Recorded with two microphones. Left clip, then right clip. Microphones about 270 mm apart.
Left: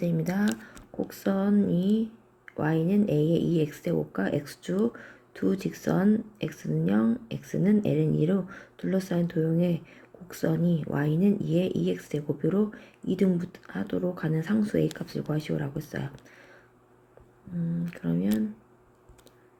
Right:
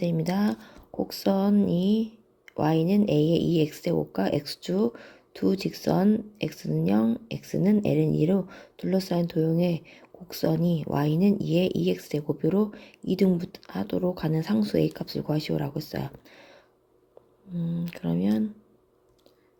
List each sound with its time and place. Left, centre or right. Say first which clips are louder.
0.0 s speech: right 2 dB; centre
17.8 s speech: right 2 dB; centre